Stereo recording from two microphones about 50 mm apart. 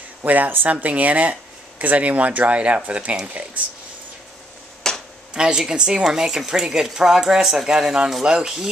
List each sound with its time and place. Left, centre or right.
0.2 s speech: right
4.8 s a sound: centre
5.3 s a woman's voice: centre